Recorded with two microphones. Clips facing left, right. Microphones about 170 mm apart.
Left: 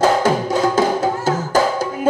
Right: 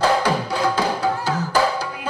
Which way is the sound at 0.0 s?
45° left (ahead or behind).